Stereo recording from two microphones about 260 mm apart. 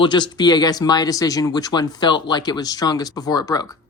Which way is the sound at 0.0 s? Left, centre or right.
Centre.